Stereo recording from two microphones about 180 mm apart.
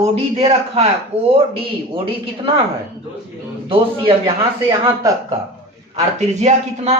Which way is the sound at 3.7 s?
30° right (ahead or behind).